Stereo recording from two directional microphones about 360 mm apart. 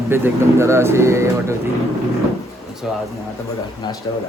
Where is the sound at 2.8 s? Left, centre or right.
Centre.